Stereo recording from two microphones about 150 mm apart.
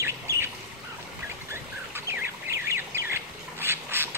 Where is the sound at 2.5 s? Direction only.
20° right (ahead or behind).